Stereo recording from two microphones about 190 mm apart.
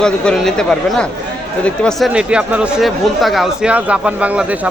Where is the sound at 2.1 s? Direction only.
5° right (ahead or behind).